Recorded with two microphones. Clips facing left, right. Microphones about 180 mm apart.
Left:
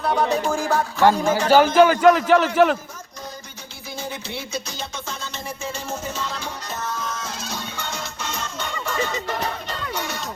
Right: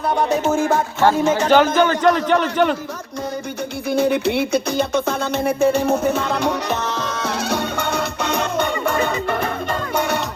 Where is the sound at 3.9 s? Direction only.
65° right (ahead or behind).